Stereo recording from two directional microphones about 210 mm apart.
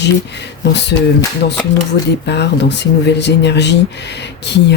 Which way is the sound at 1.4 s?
50° left (ahead or behind).